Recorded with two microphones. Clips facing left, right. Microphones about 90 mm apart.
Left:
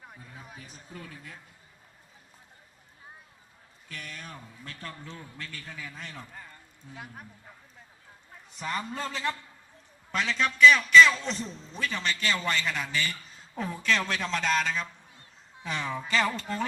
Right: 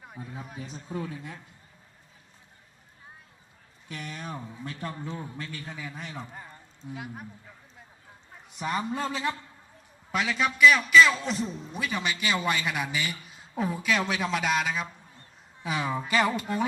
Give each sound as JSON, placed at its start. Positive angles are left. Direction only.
{"t": 0.2, "sound": "a man's voice", "side_deg": -25}
{"t": 3.8, "sound": "a man's voice", "side_deg": -20}
{"t": 6.9, "sound": "speech", "side_deg": -5}
{"t": 8.4, "sound": "a man's voice", "side_deg": -15}